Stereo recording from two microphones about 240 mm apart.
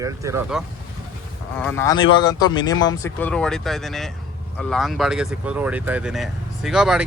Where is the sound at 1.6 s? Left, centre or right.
Centre.